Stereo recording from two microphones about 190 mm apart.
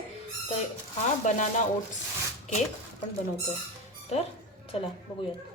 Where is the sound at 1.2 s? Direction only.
40° left (ahead or behind).